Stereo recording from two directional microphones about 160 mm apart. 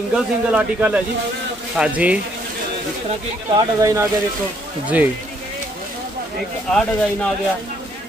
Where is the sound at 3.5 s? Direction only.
20° right (ahead or behind).